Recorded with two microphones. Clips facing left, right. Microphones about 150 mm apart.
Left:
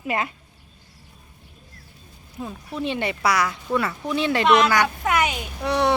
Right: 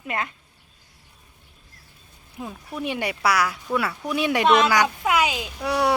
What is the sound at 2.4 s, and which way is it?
Speech, 10° right (ahead or behind).